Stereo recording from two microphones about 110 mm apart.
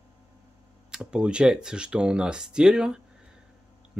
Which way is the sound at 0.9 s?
5° right (ahead or behind).